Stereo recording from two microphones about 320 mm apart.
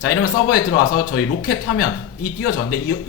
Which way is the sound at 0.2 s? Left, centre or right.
Left.